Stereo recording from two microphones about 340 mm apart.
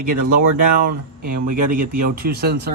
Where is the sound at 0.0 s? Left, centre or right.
Right.